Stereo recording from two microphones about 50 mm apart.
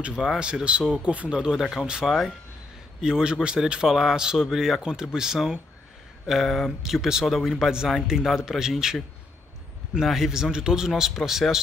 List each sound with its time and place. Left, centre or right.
0.4 s speech: centre
6.2 s speech: centre
10.0 s speech: centre